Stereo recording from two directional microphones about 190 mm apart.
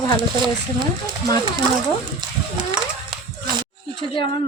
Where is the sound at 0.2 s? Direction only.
25° right (ahead or behind).